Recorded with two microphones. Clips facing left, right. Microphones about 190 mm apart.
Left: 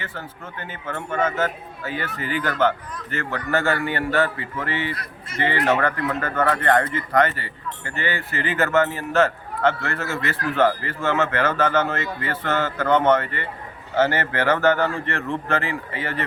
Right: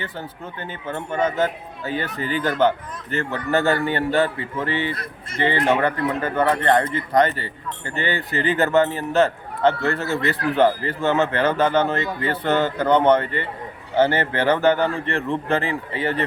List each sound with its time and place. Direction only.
0.9 s a man's voice: 15° right (ahead or behind)
6.6 s speech: 30° right (ahead or behind)
7.1 s speech: 15° right (ahead or behind)